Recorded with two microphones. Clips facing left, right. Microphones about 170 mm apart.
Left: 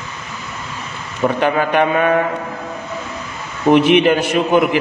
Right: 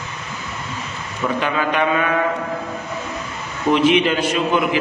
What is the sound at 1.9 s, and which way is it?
Speech, 40° left (ahead or behind).